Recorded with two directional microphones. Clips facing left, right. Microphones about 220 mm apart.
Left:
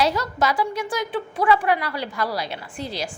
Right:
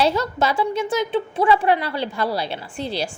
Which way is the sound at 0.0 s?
25° right (ahead or behind).